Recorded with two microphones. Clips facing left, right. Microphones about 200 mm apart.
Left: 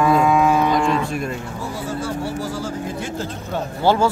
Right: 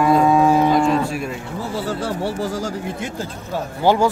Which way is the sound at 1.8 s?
65° right (ahead or behind).